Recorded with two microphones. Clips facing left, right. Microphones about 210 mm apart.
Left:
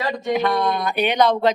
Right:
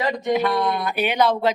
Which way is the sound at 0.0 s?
20° right (ahead or behind).